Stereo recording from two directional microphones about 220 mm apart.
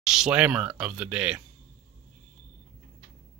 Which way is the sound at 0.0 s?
5° right (ahead or behind).